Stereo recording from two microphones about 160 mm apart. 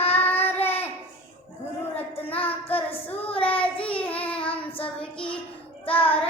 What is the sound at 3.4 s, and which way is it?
Child singing, 10° left (ahead or behind).